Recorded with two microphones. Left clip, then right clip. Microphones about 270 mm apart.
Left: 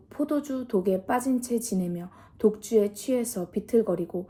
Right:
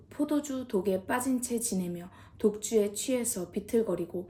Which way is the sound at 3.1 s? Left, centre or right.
Centre.